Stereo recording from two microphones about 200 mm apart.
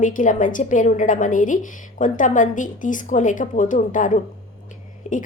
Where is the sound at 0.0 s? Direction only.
40° left (ahead or behind).